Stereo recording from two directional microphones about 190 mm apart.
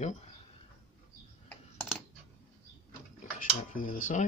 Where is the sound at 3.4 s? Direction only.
45° left (ahead or behind).